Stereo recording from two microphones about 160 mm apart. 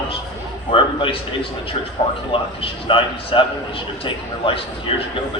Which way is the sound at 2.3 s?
35° left (ahead or behind).